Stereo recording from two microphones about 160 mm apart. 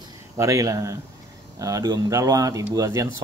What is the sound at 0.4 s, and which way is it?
Speech, 20° right (ahead or behind).